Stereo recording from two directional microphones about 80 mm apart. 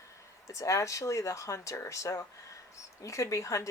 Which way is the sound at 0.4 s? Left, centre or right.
Left.